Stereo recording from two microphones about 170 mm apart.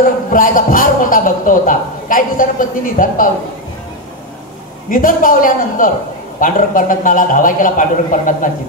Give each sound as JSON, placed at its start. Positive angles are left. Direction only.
{"t": 0.0, "sound": "a man's voice", "side_deg": 55}
{"t": 4.8, "sound": "a man's voice", "side_deg": 55}